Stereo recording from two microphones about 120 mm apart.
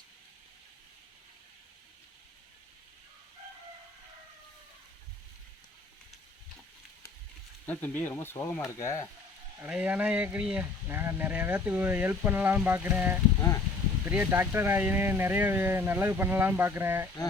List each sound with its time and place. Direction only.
7.7 s speech: 15° left (ahead or behind)
9.6 s speech: 10° right (ahead or behind)